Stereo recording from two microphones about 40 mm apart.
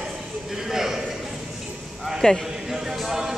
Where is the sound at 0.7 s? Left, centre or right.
Centre.